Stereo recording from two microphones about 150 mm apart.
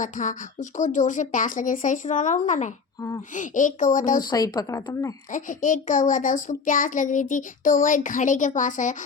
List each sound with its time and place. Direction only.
0.0 s a child's voice: 60° left (ahead or behind)
4.3 s a woman's voice: 25° left (ahead or behind)
5.3 s a child's voice: 60° left (ahead or behind)